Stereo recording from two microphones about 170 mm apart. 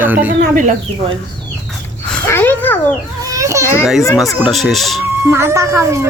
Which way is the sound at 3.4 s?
20° right (ahead or behind).